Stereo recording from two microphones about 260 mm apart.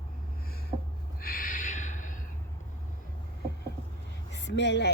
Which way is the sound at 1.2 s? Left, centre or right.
Left.